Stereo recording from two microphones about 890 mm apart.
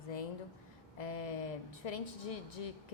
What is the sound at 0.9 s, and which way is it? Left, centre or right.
Speech, left.